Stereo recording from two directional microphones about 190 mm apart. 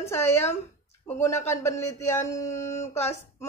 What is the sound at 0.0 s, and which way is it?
A woman's voice, 15° left (ahead or behind).